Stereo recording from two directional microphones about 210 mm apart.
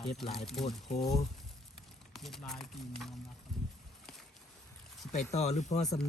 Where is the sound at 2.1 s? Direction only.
Centre (ahead or behind).